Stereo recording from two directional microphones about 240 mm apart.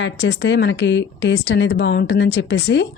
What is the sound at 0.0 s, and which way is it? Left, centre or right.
A woman's voice, left.